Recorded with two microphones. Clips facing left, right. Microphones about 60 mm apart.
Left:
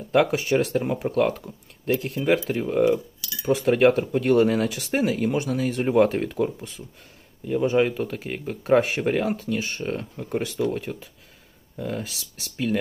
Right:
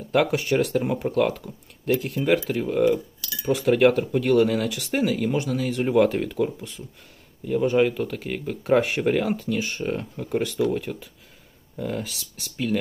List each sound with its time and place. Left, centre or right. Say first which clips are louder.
0.1 s speech: left 1 dB; centre
1.3 s speech: even; centre
2.0 s speech: right 1 dB; centre
2.6 s speech: even; centre
10.2 s speech: right 2 dB; centre